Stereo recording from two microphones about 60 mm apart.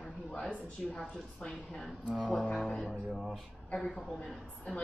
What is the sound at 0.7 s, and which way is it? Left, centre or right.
Speech, centre.